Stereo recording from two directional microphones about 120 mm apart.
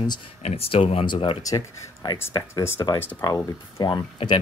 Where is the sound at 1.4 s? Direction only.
30° left (ahead or behind).